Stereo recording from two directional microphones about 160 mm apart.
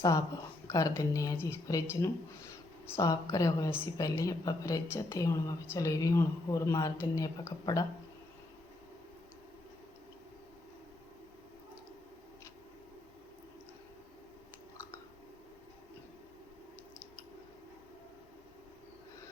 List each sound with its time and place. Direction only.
0.7 s speech: 20° left (ahead or behind)